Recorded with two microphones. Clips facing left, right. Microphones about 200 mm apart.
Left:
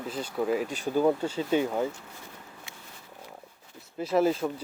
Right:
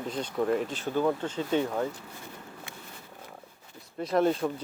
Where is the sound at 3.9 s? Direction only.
5° left (ahead or behind).